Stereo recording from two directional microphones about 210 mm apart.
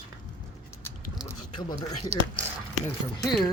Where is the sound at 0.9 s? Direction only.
15° left (ahead or behind).